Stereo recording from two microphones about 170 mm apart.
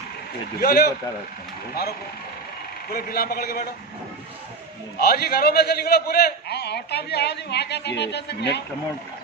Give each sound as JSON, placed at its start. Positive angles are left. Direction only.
{"t": 0.6, "sound": "a man's voice", "side_deg": 60}
{"t": 4.9, "sound": "a man's voice", "side_deg": 65}